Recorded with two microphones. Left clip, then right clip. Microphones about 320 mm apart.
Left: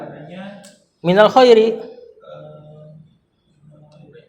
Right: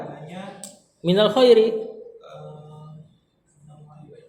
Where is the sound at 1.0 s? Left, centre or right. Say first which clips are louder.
Left 7 dB; left.